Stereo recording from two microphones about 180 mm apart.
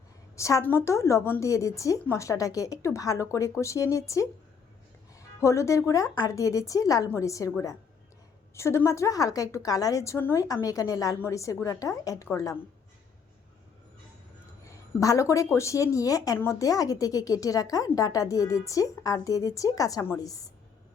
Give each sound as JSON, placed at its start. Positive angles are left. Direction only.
{"t": 0.3, "sound": "a woman's voice", "side_deg": 15}
{"t": 5.4, "sound": "a woman's voice", "side_deg": 15}
{"t": 8.5, "sound": "a woman's voice", "side_deg": 15}
{"t": 14.6, "sound": "a sound", "side_deg": 20}
{"t": 15.5, "sound": "speech", "side_deg": 15}